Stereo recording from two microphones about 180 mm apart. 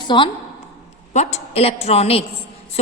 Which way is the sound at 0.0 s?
25° left (ahead or behind).